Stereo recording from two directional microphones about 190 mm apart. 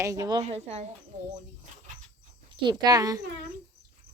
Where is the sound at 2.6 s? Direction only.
20° right (ahead or behind).